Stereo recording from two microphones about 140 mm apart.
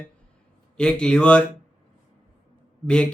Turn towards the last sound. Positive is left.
turn(degrees=5)  # may be behind; listen again after turning